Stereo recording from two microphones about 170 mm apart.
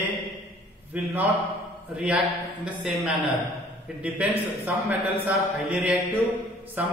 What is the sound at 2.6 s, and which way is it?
A man's voice, 5° right (ahead or behind).